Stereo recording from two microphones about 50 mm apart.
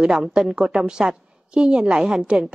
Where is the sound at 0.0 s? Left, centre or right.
Centre.